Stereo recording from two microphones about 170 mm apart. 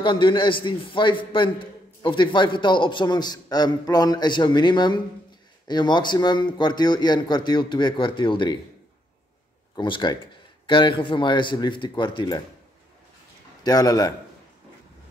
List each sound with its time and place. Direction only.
0.0 s a man's voice: 30° left (ahead or behind)
9.8 s a man's voice: 30° left (ahead or behind)
13.7 s a man's voice: 20° left (ahead or behind)